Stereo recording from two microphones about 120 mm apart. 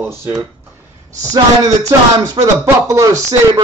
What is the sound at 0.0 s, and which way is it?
Speech, 20° right (ahead or behind).